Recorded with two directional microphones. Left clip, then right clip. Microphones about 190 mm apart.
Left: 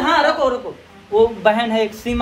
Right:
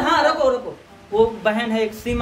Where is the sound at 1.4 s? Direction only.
5° right (ahead or behind).